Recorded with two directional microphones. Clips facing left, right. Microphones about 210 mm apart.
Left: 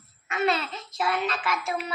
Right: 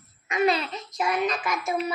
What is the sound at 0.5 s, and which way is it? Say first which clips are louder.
Speech: right 2 dB; centre (ahead or behind).